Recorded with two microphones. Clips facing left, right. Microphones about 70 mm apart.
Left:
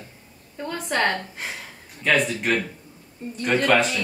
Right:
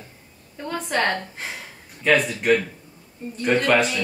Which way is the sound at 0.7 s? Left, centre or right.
Centre.